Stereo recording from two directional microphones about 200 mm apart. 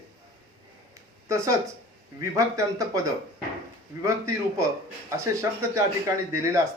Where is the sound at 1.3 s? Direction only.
15° right (ahead or behind).